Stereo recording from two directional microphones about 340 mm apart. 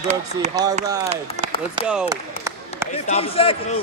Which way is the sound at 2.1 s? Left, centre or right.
Centre.